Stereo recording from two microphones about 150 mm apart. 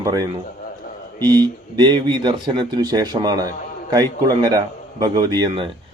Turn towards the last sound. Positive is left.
turn(degrees=-25)  # may be behind; listen again after turning